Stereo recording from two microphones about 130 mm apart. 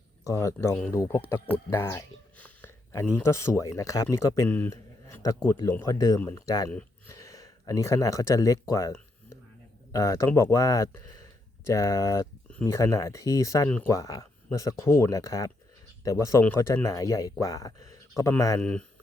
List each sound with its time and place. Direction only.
0.3 s speech: 25° left (ahead or behind)
4.4 s speech: 15° left (ahead or behind)
4.7 s a sound: 25° left (ahead or behind)
5.5 s speech: 25° left (ahead or behind)
6.1 s speech: 15° left (ahead or behind)
8.7 s a sound: 25° left (ahead or behind)
9.9 s speech: 25° left (ahead or behind)
18.6 s speech: 10° left (ahead or behind)